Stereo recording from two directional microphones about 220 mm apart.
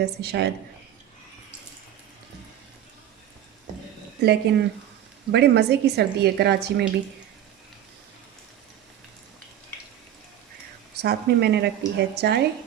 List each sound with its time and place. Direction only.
0.0 s a woman's voice: 50° right (ahead or behind)
4.2 s a woman's voice: 50° right (ahead or behind)
10.9 s a woman's voice: 45° right (ahead or behind)